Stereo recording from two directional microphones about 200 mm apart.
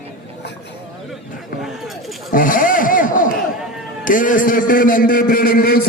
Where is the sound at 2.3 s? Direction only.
45° left (ahead or behind).